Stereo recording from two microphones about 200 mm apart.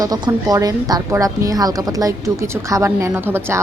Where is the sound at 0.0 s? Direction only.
15° right (ahead or behind).